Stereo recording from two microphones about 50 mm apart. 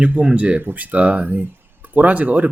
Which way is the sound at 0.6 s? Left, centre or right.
Right.